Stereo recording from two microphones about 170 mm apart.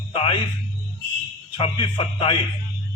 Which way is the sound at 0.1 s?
35° left (ahead or behind).